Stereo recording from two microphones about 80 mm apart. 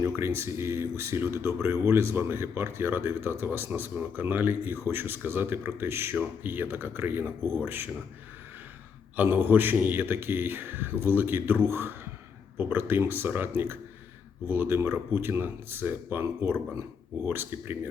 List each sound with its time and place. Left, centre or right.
0.0 s speech: right
9.1 s speech: right